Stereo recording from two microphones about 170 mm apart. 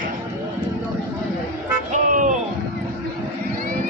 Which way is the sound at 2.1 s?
50° right (ahead or behind).